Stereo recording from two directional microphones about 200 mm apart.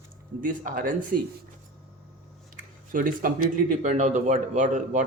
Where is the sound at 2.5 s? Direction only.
40° right (ahead or behind).